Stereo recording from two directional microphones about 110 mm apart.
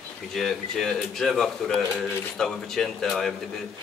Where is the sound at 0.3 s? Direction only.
5° left (ahead or behind).